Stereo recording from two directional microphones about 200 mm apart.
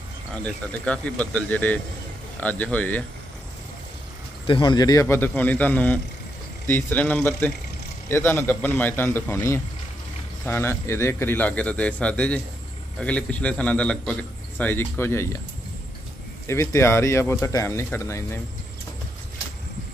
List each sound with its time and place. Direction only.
0.3 s a man's voice: 5° left (ahead or behind)
4.5 s a man's voice: 25° left (ahead or behind)
16.4 s a man's voice: 15° left (ahead or behind)